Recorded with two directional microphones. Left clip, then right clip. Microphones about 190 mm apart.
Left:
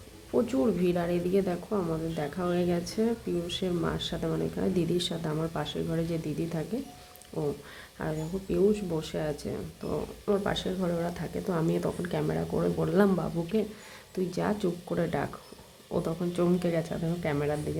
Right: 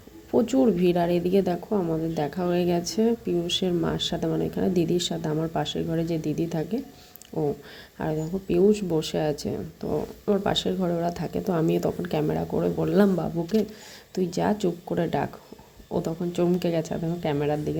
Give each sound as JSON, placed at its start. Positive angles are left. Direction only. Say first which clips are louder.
{"t": 0.3, "sound": "a woman's voice", "louder": "right 5 dB", "side_deg": -15}
{"t": 7.3, "sound": "speech", "louder": "right 5 dB", "side_deg": 0}
{"t": 7.9, "sound": "a woman's voice", "louder": "right 5 dB", "side_deg": -15}